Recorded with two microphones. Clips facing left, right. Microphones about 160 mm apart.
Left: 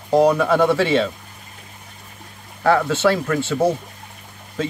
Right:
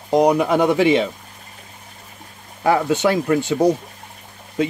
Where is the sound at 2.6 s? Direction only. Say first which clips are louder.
Even; 15° right (ahead or behind).